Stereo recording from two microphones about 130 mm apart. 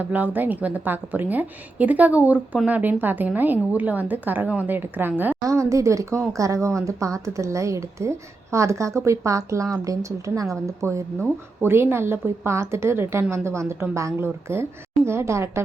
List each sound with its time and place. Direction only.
0.0 s a woman's voice: 15° right (ahead or behind)